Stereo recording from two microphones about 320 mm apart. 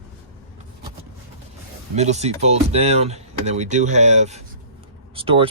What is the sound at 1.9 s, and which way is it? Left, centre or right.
Speech, right.